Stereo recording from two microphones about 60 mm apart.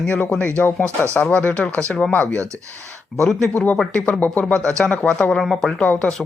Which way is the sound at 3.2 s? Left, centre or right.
Centre.